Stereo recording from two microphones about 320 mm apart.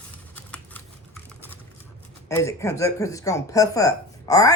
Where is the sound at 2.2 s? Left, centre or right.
Centre.